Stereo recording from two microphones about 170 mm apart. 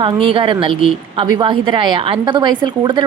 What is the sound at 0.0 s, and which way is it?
A woman's voice, 30° right (ahead or behind).